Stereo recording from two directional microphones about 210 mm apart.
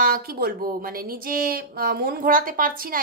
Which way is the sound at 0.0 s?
45° right (ahead or behind).